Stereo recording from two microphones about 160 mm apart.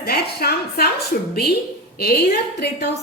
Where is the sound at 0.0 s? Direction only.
80° left.